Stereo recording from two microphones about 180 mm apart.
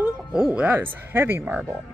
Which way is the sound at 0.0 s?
5° right (ahead or behind).